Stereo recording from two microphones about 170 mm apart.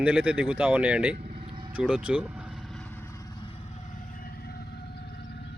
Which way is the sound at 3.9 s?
50° left (ahead or behind).